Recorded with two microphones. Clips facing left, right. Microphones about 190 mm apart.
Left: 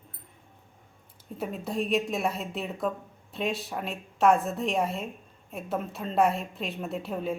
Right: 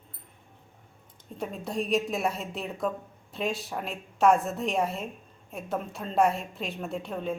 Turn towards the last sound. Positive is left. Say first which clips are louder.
# left 1 dB
turn(degrees=5)  # may be behind; listen again after turning